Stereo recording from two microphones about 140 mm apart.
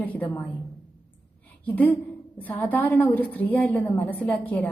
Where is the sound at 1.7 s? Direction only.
10° left (ahead or behind).